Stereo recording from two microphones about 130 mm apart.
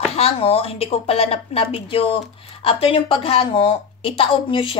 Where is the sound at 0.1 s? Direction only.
50° left (ahead or behind).